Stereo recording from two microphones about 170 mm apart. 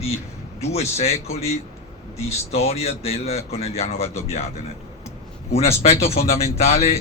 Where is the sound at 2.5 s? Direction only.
40° left (ahead or behind).